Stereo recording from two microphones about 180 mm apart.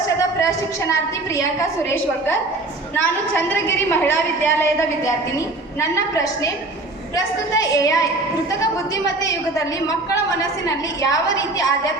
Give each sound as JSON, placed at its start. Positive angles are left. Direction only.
{"t": 0.2, "sound": "a sound", "side_deg": 15}
{"t": 2.9, "sound": "a woman's voice", "side_deg": 10}
{"t": 7.5, "sound": "a woman's voice", "side_deg": 20}